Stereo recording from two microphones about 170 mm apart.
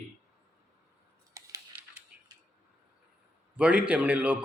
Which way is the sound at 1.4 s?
15° right (ahead or behind).